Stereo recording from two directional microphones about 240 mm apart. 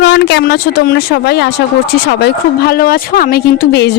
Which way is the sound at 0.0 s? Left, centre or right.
Left.